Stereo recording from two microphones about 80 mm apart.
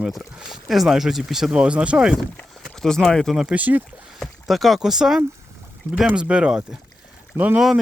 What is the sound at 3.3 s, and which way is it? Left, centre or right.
Speech, centre.